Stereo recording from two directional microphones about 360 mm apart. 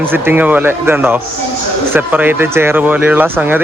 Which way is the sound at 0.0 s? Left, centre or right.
Centre.